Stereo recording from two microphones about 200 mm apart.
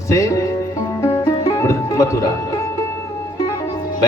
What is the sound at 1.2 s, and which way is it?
Music, 15° left (ahead or behind).